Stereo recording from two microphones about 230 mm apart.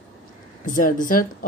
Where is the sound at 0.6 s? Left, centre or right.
Left.